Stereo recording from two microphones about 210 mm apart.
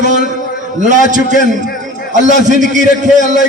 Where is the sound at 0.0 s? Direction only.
35° right (ahead or behind).